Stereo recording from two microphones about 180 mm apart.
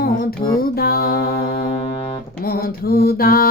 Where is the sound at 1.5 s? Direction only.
30° left (ahead or behind).